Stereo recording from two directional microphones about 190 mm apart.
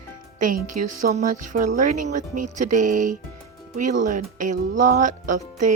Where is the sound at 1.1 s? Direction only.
40° right (ahead or behind).